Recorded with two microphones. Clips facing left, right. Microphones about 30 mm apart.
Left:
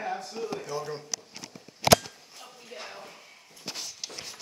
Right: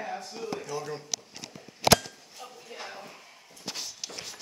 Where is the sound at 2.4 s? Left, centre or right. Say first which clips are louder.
Right 1 dB; centre.